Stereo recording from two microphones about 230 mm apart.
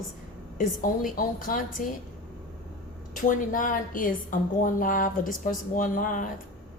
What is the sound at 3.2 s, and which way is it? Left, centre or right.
A woman's voice, left.